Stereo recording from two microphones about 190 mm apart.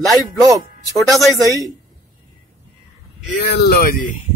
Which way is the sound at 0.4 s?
20° right (ahead or behind).